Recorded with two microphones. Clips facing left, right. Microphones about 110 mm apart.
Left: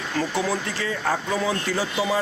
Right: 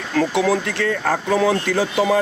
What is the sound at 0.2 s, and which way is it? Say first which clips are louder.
Speech: right 7 dB; 70° right (ahead or behind).